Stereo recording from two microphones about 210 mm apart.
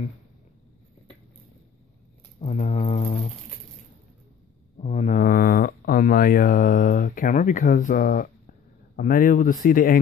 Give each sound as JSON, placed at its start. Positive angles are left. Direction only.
{"t": 2.4, "sound": "speech", "side_deg": 30}
{"t": 4.7, "sound": "speech", "side_deg": 35}